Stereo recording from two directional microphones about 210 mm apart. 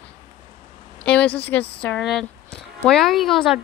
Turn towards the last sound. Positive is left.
turn(degrees=0)  # may be behind; listen again after turning